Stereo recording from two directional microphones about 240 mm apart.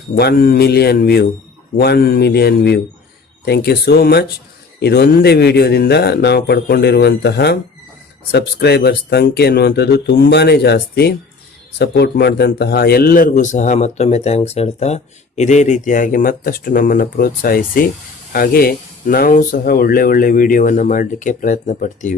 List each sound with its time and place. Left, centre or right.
0.2 s a man's voice: left